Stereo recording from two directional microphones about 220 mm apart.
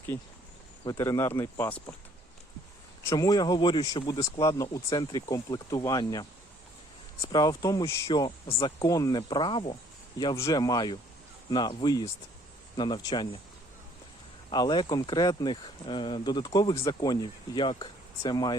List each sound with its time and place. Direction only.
0.9 s speech: 15° left (ahead or behind)
3.1 s speech: 15° left (ahead or behind)
14.5 s speech: 20° left (ahead or behind)